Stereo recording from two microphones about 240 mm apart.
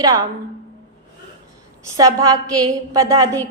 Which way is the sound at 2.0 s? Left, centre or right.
Centre.